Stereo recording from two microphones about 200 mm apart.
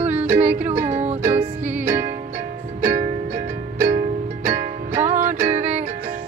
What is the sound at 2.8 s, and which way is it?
Music, 40° right (ahead or behind).